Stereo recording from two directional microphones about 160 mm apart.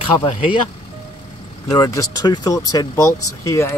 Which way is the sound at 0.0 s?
35° left (ahead or behind).